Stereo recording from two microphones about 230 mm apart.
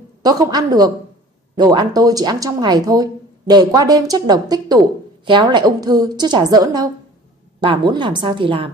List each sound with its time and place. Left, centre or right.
0.2 s a woman's voice: centre